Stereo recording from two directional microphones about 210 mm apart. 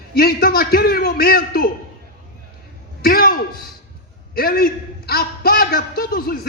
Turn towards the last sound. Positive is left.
turn(degrees=45)  # may be behind; listen again after turning